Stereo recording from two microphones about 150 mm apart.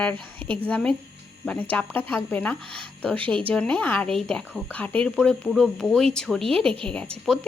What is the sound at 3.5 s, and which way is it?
Speech, 10° left (ahead or behind).